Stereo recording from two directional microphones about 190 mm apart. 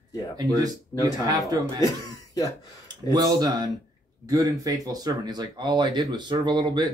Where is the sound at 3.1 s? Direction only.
20° right (ahead or behind).